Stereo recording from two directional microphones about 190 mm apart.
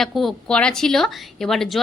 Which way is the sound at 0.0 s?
Centre (ahead or behind).